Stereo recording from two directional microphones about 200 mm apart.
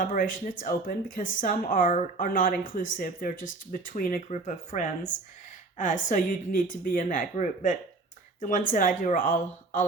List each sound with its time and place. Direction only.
0.0 s speech: 45° left (ahead or behind)